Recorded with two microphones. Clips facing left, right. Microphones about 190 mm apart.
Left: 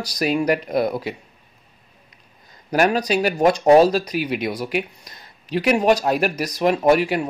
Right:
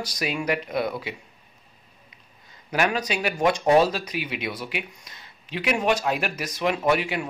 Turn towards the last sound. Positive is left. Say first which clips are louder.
# left 6 dB
turn(degrees=40)  # may be behind; listen again after turning